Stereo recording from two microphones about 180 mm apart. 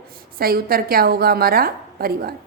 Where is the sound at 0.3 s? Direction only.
55° right (ahead or behind).